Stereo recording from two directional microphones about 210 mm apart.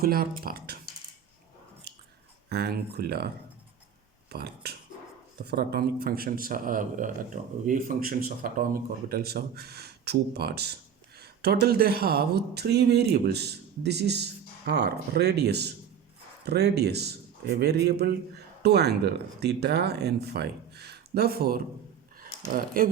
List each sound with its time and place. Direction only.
0.0 s speech: 45° right (ahead or behind)
2.5 s a man's voice: 50° right (ahead or behind)
4.3 s a man's voice: 50° right (ahead or behind)
22.2 s a sound: 40° right (ahead or behind)